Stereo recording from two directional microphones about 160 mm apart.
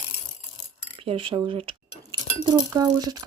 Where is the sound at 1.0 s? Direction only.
35° right (ahead or behind).